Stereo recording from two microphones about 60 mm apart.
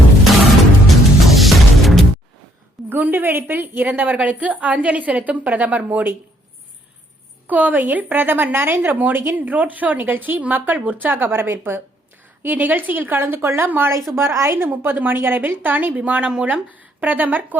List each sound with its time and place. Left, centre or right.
0.9 s music: centre
2.9 s a woman's voice: right
7.4 s speech: right
12.4 s speech: right
14.2 s a woman's voice: right